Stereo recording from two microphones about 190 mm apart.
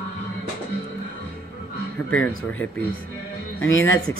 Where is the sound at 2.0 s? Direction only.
10° left (ahead or behind).